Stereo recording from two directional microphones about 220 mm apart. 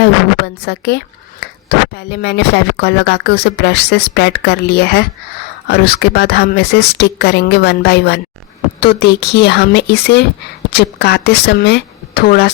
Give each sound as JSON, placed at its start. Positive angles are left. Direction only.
{"t": 0.0, "sound": "a woman's voice", "side_deg": 50}